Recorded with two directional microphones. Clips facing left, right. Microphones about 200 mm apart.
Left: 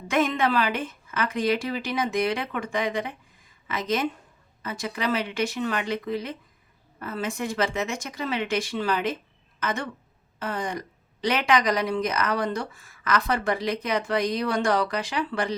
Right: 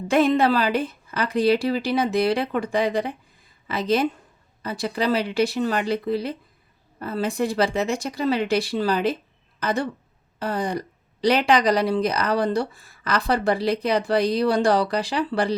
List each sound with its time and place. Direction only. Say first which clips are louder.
0.1 s speech: right 5 dB; 35° right (ahead or behind)